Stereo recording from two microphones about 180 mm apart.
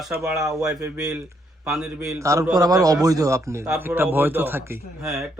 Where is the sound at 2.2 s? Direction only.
15° right (ahead or behind).